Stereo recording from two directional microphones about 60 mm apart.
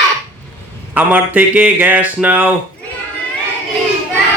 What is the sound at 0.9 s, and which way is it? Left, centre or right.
Speech, right.